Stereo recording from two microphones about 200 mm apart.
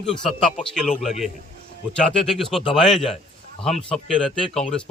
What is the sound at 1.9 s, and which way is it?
Speech, centre (ahead or behind).